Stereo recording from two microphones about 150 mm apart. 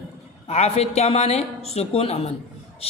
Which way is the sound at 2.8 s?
40° left (ahead or behind).